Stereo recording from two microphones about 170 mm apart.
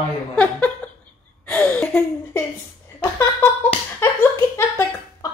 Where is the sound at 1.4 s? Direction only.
10° left (ahead or behind).